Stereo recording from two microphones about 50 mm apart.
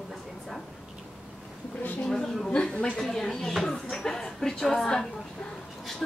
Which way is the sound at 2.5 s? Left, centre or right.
Centre.